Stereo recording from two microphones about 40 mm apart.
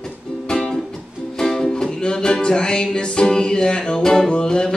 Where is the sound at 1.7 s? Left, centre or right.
Left.